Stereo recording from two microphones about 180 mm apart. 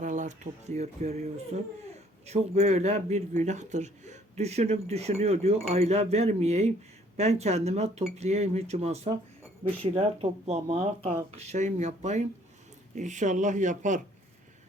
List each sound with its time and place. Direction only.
0.0 s a man's voice: 45° right (ahead or behind)